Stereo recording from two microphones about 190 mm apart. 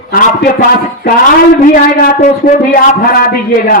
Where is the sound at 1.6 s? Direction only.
45° left (ahead or behind).